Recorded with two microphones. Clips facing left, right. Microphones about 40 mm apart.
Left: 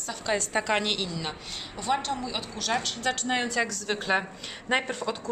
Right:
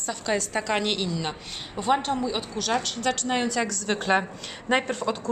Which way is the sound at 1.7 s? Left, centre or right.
Right.